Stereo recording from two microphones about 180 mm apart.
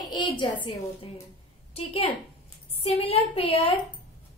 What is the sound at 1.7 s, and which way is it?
A woman's voice, 35° left (ahead or behind).